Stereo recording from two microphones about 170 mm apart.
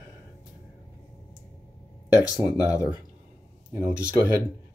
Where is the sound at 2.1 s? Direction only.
5° right (ahead or behind).